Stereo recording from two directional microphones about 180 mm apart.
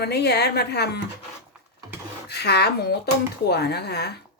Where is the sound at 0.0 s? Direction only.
65° left (ahead or behind).